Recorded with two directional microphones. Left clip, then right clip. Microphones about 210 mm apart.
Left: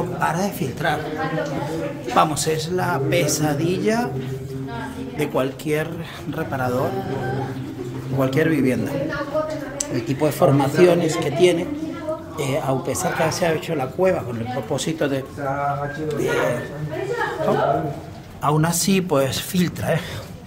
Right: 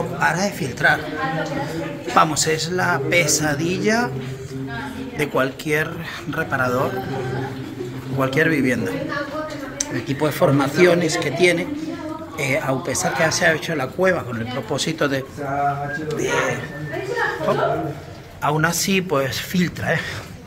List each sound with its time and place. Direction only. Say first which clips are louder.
0.2 s speech: right 3 dB; 10° left (ahead or behind)
2.1 s a man's voice: right 2 dB; 5° left (ahead or behind)
5.2 s a man's voice: right 2 dB; 5° left (ahead or behind)
8.2 s a man's voice: right 1 dB; 10° left (ahead or behind)
18.4 s speech: right 1 dB; 15° left (ahead or behind)